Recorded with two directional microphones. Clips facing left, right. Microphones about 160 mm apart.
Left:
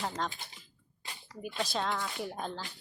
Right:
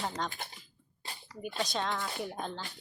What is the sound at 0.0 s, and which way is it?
Speech, centre (ahead or behind).